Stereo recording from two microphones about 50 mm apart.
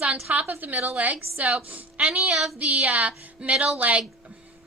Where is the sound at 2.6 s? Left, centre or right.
Right.